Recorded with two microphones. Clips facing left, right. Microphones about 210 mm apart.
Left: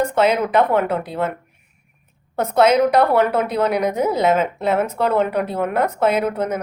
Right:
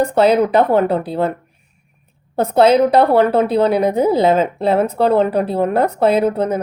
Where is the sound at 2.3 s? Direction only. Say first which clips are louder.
Right 3 dB; 30° right (ahead or behind).